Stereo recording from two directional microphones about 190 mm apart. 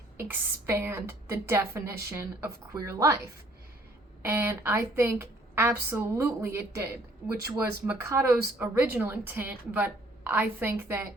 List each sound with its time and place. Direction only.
0.2 s a woman's voice: 10° right (ahead or behind)
4.2 s a woman's voice: 10° right (ahead or behind)